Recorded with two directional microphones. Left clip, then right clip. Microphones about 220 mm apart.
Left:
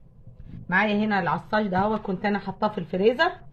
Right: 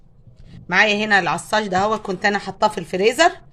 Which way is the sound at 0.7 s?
50° right (ahead or behind).